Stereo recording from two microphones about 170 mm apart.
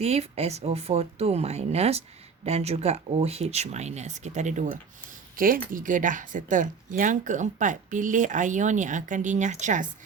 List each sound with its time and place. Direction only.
0.0 s speech: 40° right (ahead or behind)
5.4 s speech: 55° right (ahead or behind)